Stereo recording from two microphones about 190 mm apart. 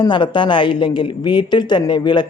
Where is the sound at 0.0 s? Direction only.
25° left (ahead or behind).